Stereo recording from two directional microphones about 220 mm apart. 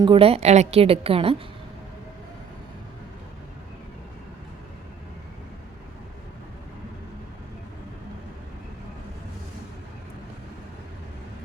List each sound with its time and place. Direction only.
0.0 s a woman's voice: 25° right (ahead or behind)